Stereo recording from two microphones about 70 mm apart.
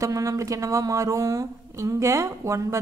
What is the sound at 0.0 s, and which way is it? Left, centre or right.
A woman's voice, right.